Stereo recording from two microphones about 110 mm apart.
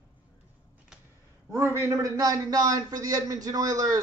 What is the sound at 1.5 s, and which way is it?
A man's voice, 25° right (ahead or behind).